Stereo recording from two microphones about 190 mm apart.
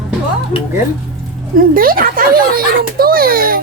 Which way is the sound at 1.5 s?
50° right (ahead or behind).